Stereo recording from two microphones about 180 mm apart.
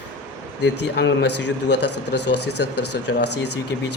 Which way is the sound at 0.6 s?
70° left (ahead or behind).